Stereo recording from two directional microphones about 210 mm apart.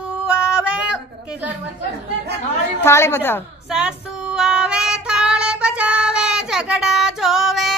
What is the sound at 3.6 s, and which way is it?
Female singing, 5° right (ahead or behind).